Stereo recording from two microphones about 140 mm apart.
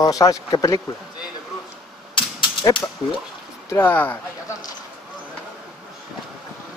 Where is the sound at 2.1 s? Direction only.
35° left (ahead or behind).